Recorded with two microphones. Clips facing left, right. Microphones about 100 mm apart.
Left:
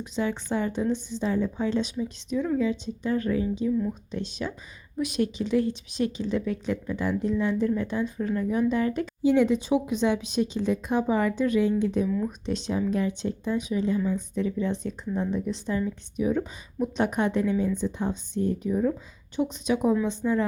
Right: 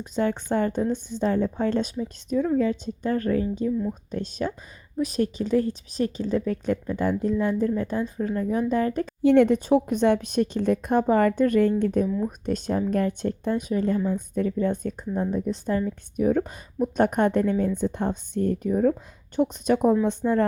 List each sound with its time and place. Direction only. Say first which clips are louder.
0.0 s a woman's voice: right 3 dB; 50° right (ahead or behind)
9.2 s a woman's voice: right 4 dB; 60° right (ahead or behind)
12.0 s speech: right 1 dB; 25° right (ahead or behind)
12.5 s a woman's voice: right 3 dB; 50° right (ahead or behind)